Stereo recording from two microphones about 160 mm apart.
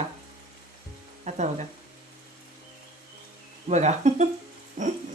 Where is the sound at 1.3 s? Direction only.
45° right (ahead or behind).